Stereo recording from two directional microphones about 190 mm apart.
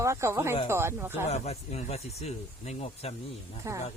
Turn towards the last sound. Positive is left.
turn(degrees=-15)  # may be behind; listen again after turning